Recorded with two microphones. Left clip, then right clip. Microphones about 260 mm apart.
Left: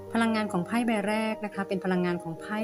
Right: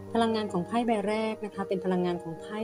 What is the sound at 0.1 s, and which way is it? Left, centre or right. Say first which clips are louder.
A woman's voice: even; left.